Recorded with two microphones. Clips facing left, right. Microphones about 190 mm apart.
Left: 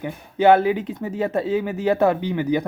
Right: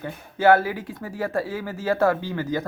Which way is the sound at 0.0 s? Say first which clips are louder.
Left 3 dB; 20° left (ahead or behind).